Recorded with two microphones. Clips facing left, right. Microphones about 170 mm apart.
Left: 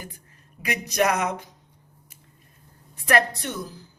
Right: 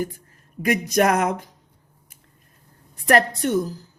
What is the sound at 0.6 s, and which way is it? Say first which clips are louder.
Speech: right 5 dB; 45° right (ahead or behind).